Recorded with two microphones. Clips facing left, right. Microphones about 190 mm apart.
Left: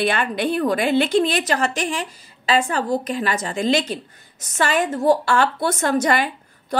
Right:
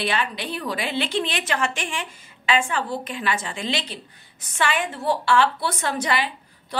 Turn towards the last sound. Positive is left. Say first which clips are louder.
# left 8 dB
turn(degrees=45)  # may be behind; listen again after turning